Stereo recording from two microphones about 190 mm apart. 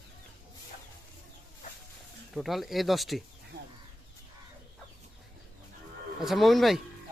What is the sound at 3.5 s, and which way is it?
Bird, 55° right (ahead or behind).